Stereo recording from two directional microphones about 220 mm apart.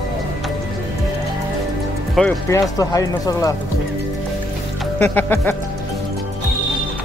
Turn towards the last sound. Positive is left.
turn(degrees=10)  # may be behind; listen again after turning